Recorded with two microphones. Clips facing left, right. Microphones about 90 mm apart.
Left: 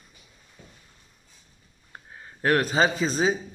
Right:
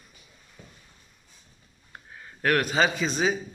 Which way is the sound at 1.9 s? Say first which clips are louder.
Left 1 dB; 25° left (ahead or behind).